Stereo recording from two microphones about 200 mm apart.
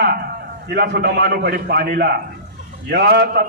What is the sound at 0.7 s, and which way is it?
A man's voice, 55° right (ahead or behind).